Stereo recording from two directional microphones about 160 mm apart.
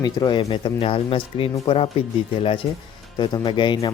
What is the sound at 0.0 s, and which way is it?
Speech, 25° left (ahead or behind).